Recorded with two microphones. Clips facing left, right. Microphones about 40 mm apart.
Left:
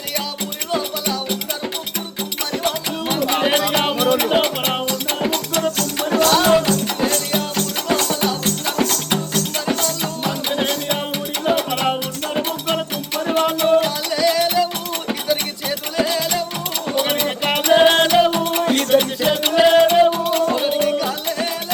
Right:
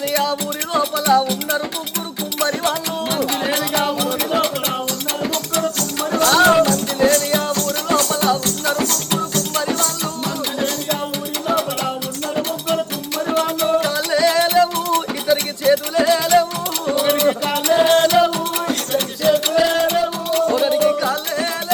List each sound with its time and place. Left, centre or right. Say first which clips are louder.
0.7 s music: right 4 dB; centre
2.4 s music: right 3 dB; centre
3.2 s music: left 3 dB; centre
7.5 s music: right 2 dB; centre
11.4 s music: left 2 dB; centre
14.1 s music: right 3 dB; centre